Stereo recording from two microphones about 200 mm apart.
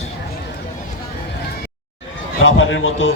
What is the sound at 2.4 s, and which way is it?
Speech, 75° left (ahead or behind).